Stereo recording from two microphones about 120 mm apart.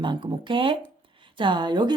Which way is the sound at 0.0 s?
40° right (ahead or behind).